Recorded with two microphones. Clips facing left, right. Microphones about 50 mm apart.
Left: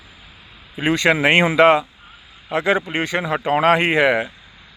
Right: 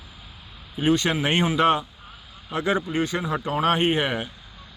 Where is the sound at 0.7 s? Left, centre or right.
Left.